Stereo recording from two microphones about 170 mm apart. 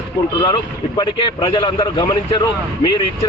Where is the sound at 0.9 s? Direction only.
25° left (ahead or behind).